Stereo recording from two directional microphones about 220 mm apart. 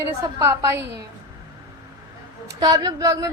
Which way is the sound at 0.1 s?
10° right (ahead or behind).